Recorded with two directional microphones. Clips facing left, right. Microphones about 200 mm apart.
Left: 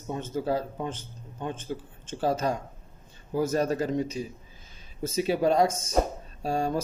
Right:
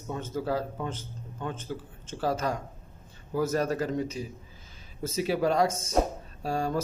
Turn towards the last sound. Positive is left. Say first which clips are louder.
# left 2 dB
turn(degrees=20)  # may be behind; listen again after turning